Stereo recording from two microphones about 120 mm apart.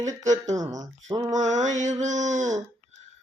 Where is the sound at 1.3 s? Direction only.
85° right.